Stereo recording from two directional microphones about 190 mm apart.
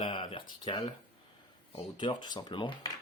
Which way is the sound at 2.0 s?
25° left (ahead or behind).